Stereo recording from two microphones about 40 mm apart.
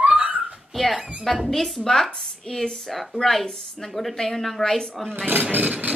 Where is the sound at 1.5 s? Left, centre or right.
Centre.